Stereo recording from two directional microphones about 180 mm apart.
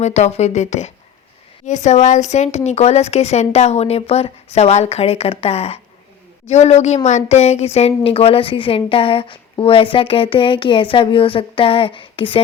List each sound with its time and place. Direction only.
0.0 s a woman's voice: 35° left (ahead or behind)